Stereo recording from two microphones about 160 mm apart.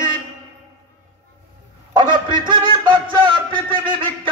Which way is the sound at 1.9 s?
30° right (ahead or behind).